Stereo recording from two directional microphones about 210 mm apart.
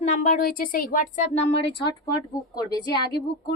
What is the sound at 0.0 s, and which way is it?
Speech, 35° left (ahead or behind).